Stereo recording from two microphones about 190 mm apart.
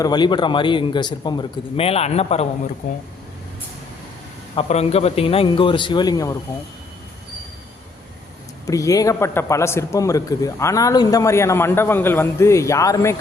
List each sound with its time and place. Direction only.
0.0 s a man's voice: 20° left (ahead or behind); by 3.0 s 45° left (ahead or behind)
4.5 s a man's voice: 35° left (ahead or behind)
8.6 s a man's voice: 20° left (ahead or behind)